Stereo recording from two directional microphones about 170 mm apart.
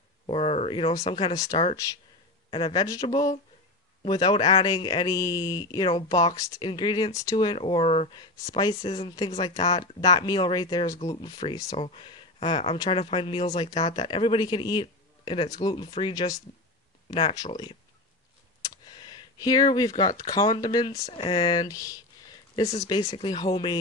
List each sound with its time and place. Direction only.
0.3 s speech: 35° left (ahead or behind)
18.6 s speech: 25° left (ahead or behind)